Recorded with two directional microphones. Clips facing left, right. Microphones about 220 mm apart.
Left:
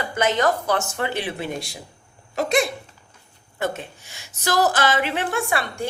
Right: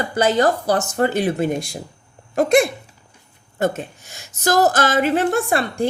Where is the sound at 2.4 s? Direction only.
50° right (ahead or behind).